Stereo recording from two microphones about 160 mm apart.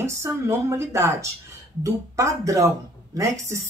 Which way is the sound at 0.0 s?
15° right (ahead or behind).